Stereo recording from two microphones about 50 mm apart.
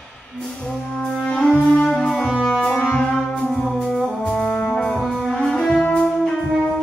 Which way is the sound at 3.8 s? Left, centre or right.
Centre.